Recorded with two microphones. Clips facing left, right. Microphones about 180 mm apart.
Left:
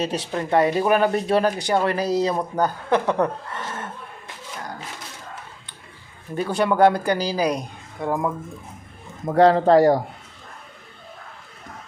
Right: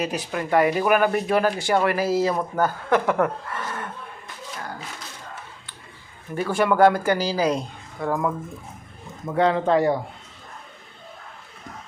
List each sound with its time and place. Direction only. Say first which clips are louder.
0.0 s speech: left 1 dB; 30° left (ahead or behind)
6.3 s speech: even; 20° left (ahead or behind)
9.2 s speech: left 5 dB; 40° left (ahead or behind)